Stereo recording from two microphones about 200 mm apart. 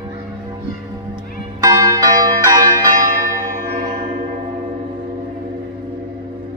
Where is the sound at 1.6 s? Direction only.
15° right (ahead or behind).